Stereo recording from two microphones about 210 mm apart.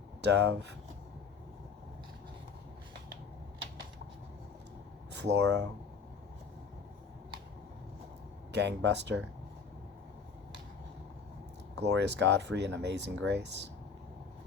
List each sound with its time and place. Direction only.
0.2 s speech: 55° right (ahead or behind)
5.1 s speech: 55° right (ahead or behind)
8.5 s speech: 55° right (ahead or behind)
11.7 s speech: 55° right (ahead or behind)